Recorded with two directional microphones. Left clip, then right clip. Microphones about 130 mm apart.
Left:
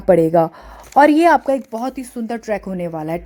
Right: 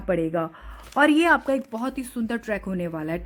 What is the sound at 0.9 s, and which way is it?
Speech, 15° left (ahead or behind).